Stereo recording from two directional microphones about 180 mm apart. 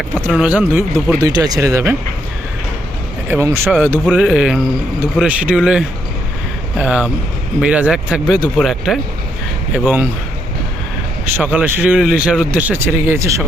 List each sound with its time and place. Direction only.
0.3 s speech: 5° right (ahead or behind)
1.2 s speech: 20° right (ahead or behind)
3.2 s a man's voice: 15° right (ahead or behind)
11.3 s speech: 10° right (ahead or behind)